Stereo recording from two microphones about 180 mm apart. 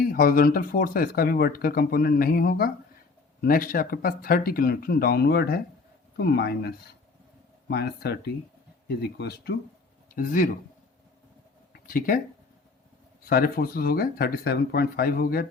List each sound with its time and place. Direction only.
0.0 s speech: 55° left (ahead or behind)
10.1 s speech: 50° left (ahead or behind)
11.7 s speech: 50° left (ahead or behind)
13.2 s speech: 55° left (ahead or behind)